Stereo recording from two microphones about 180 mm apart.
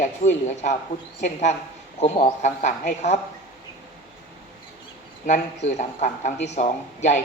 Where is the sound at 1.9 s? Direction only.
40° left (ahead or behind).